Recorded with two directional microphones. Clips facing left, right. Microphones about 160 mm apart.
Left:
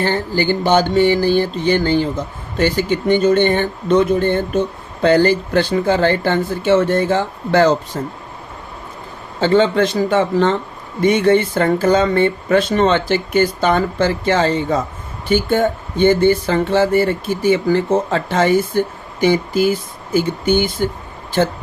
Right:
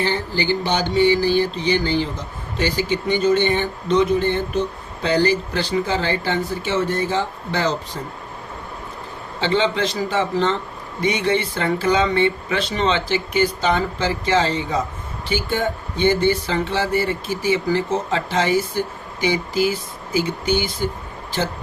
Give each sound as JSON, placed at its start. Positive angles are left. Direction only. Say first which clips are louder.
{"t": 0.0, "sound": "speech", "louder": "left 4 dB", "side_deg": 50}
{"t": 9.4, "sound": "speech", "louder": "left 6 dB", "side_deg": 50}